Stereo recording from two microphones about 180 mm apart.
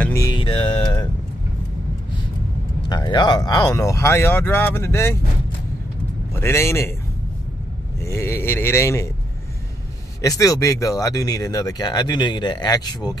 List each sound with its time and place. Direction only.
0.0 s music: 15° left (ahead or behind)
0.4 s music: 30° left (ahead or behind)
2.9 s speech: 25° left (ahead or behind)
6.3 s speech: 15° left (ahead or behind)
8.0 s speech: 15° left (ahead or behind)
10.2 s speech: 20° left (ahead or behind)